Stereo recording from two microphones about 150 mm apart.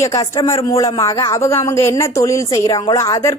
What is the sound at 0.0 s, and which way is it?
A woman's voice, 20° left (ahead or behind).